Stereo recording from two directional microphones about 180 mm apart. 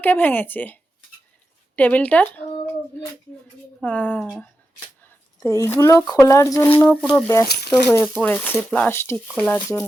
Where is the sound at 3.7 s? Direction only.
10° left (ahead or behind).